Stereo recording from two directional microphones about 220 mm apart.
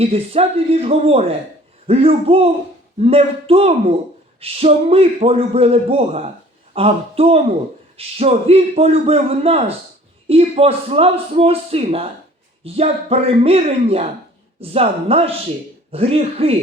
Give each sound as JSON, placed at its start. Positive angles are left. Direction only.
{"t": 0.0, "sound": "a man's voice", "side_deg": -25}